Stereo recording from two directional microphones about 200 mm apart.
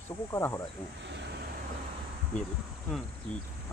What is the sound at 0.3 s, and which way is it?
Speech, 15° left (ahead or behind).